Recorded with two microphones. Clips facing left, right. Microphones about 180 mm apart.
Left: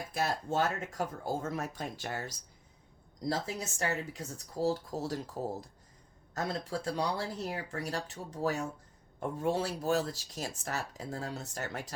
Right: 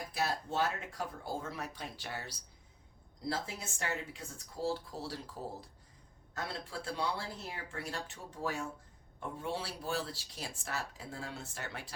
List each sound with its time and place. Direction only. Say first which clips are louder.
0.1 s speech: left 4 dB; 45° left (ahead or behind)